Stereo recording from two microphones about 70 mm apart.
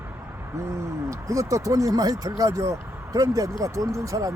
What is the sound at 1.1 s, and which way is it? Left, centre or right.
Speech, right.